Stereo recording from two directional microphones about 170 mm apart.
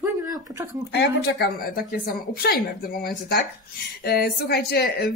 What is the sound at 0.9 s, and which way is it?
Speech, 75° left (ahead or behind).